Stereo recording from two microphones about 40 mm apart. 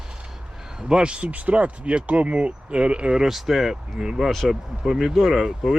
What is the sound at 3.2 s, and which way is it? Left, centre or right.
Speech, centre.